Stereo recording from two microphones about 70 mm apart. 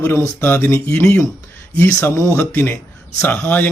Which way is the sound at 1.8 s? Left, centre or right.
Left.